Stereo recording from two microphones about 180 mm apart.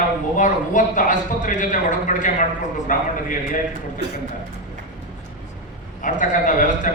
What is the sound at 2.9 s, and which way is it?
Speech, 45° left (ahead or behind).